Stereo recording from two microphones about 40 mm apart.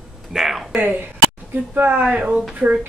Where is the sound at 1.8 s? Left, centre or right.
Right.